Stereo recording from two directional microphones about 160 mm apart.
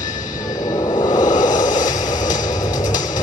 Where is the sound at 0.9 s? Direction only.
25° left (ahead or behind).